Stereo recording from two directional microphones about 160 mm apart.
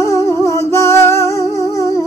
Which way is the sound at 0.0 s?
20° left (ahead or behind).